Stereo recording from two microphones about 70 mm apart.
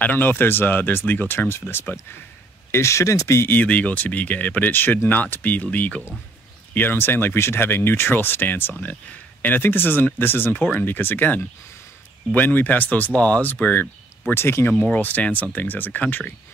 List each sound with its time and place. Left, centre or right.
0.0 s speech: left
2.7 s speech: left
3.4 s speech: left
14.3 s speech: left
15.0 s speech: left